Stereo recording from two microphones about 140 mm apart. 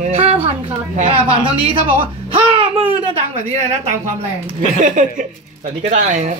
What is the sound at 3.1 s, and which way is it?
Speech, 55° right (ahead or behind).